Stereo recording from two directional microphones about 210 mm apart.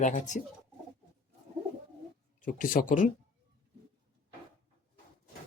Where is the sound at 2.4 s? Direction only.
40° left (ahead or behind).